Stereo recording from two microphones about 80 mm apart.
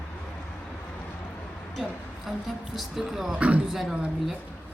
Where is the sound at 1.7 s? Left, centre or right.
Centre.